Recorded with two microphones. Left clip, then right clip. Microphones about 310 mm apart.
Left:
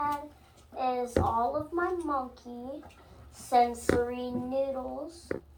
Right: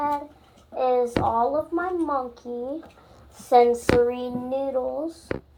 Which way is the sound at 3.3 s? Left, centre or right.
Right.